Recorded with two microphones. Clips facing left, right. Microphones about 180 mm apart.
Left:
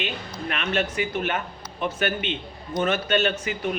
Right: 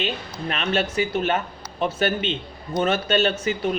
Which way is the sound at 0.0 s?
30° right (ahead or behind).